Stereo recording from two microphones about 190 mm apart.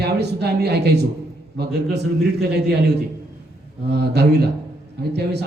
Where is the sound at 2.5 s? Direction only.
60° right (ahead or behind).